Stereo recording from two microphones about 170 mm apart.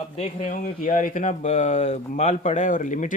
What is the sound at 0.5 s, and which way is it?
Speech, 50° left (ahead or behind).